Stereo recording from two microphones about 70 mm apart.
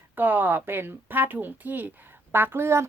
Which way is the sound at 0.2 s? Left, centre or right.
Right.